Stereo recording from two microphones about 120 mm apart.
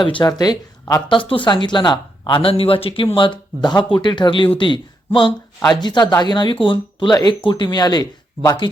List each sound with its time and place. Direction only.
0.0 s speech: 40° left (ahead or behind)
1.0 s speech: 45° left (ahead or behind)